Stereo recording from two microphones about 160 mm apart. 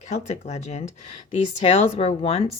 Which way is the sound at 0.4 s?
45° left (ahead or behind).